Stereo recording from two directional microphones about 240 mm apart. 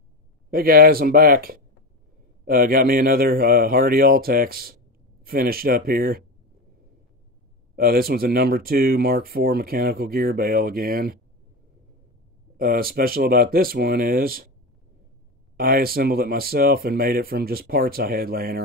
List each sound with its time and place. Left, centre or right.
0.5 s speech: right
7.7 s speech: right
12.5 s speech: right
15.5 s speech: right